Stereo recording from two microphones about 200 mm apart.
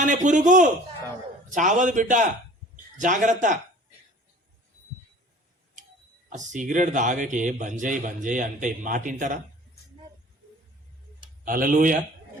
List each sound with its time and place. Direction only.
0.0 s a man's voice: 40° right (ahead or behind)
6.3 s a man's voice: 40° right (ahead or behind)
11.4 s speech: 45° right (ahead or behind)